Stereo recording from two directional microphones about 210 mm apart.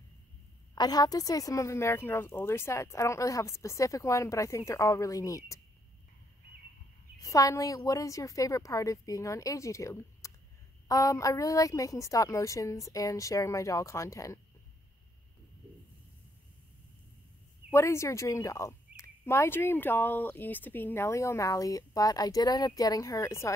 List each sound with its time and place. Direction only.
0.7 s speech: 20° left (ahead or behind)
7.2 s speech: 15° left (ahead or behind)
17.6 s speech: 10° left (ahead or behind)